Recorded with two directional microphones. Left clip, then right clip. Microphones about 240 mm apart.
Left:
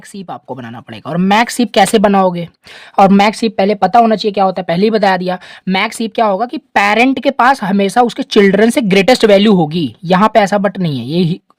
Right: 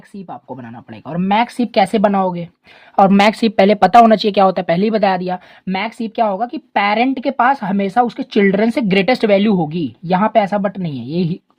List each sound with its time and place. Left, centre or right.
0.3 s a woman's voice: left